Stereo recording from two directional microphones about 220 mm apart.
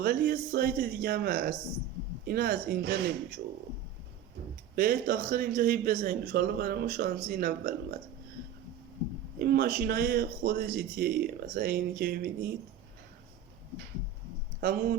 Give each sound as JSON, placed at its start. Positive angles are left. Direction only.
{"t": 0.0, "sound": "a man's voice", "side_deg": -45}
{"t": 4.7, "sound": "a man's voice", "side_deg": -45}
{"t": 9.4, "sound": "a man's voice", "side_deg": -45}
{"t": 14.6, "sound": "a man's voice", "side_deg": -40}